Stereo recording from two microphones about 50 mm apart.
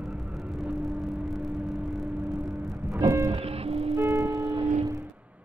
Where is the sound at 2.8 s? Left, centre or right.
Right.